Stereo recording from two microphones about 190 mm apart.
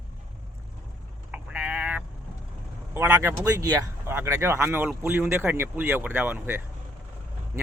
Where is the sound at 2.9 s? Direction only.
10° right (ahead or behind).